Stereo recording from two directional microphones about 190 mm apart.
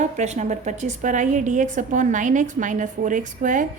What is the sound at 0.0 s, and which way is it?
A woman's voice, 40° right (ahead or behind).